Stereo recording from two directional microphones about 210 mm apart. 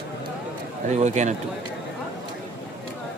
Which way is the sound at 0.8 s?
35° right (ahead or behind).